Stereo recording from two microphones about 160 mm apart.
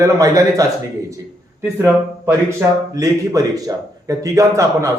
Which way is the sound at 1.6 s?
15° right (ahead or behind).